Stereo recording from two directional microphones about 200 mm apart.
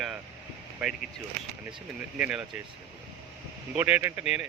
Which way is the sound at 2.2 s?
5° right (ahead or behind).